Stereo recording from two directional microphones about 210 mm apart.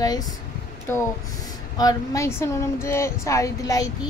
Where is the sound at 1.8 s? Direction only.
15° left (ahead or behind).